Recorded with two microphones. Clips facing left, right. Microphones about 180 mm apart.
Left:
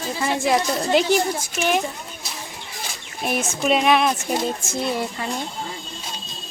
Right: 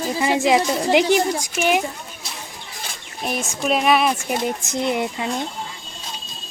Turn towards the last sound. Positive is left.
turn(degrees=-15)  # may be behind; listen again after turning